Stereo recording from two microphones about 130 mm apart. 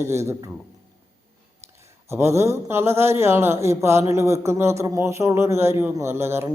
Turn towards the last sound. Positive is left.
turn(degrees=-20)  # may be behind; listen again after turning